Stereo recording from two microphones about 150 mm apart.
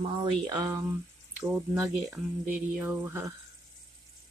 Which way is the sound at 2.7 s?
15° right (ahead or behind).